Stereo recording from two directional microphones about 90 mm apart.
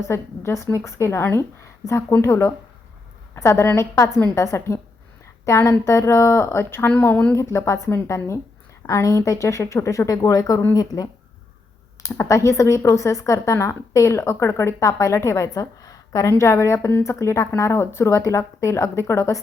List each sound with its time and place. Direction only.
0.0 s a woman's voice: 30° left (ahead or behind)
7.0 s a woman's voice: 15° left (ahead or behind)
7.5 s speech: 30° left (ahead or behind)
16.3 s speech: 30° left (ahead or behind)